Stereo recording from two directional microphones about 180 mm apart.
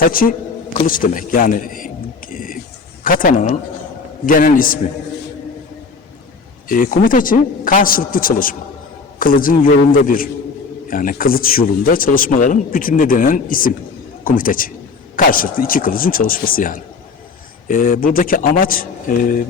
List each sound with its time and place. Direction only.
0.1 s a sound: 50° left (ahead or behind)
3.0 s speech: 50° left (ahead or behind)
6.7 s speech: 50° left (ahead or behind)